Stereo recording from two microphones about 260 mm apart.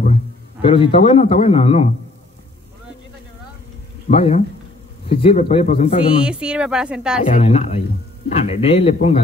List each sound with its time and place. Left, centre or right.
0.0 s a man's voice: left
4.1 s speech: left
6.2 s speech: centre
7.2 s speech: left